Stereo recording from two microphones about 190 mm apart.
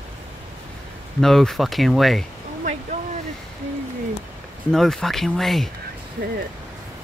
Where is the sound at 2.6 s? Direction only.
40° right (ahead or behind).